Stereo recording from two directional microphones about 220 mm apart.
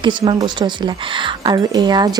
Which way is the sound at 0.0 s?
20° right (ahead or behind).